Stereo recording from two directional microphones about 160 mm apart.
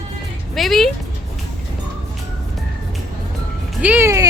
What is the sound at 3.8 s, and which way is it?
Speech, 10° right (ahead or behind).